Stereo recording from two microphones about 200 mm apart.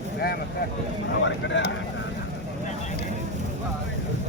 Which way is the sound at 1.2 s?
65° left (ahead or behind).